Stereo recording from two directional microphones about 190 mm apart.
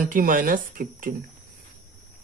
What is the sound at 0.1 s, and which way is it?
Speech, 45° right (ahead or behind).